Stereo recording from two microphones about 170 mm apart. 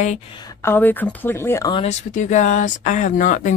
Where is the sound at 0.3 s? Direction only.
25° left (ahead or behind).